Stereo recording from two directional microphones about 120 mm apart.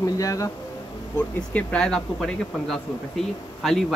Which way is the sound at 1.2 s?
10° left (ahead or behind).